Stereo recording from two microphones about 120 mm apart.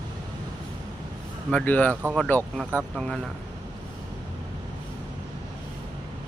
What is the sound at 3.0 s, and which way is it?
Speech, 5° left (ahead or behind).